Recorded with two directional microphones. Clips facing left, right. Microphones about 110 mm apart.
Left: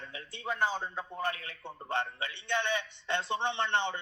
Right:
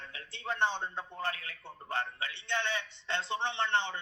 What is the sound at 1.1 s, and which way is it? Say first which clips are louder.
A man's voice: left 2 dB; 20° left (ahead or behind).